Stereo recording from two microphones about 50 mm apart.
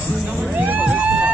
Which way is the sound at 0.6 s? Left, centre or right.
Right.